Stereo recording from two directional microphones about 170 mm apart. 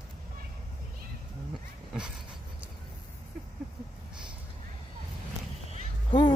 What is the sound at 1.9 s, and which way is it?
Vehicle, 5° right (ahead or behind).